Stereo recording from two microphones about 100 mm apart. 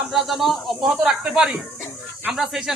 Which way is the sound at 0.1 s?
Centre (ahead or behind).